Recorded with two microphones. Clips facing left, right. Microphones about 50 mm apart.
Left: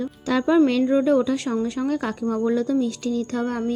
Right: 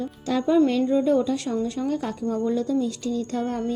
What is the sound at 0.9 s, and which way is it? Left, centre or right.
A woman's voice, left.